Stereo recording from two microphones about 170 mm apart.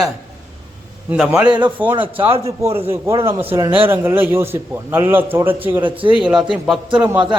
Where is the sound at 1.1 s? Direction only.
5° right (ahead or behind).